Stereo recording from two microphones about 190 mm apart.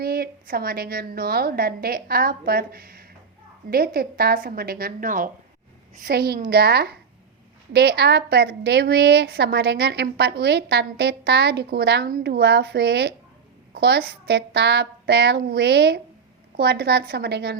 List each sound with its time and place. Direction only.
0.0 s a woman's voice: 55° right (ahead or behind)